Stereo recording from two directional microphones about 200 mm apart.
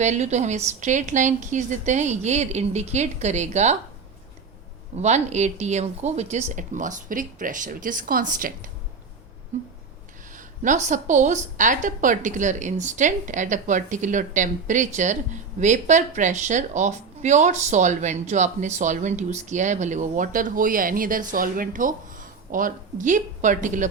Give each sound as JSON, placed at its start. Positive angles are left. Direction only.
{"t": 0.0, "sound": "a woman's voice", "side_deg": -35}
{"t": 4.9, "sound": "a woman's voice", "side_deg": -35}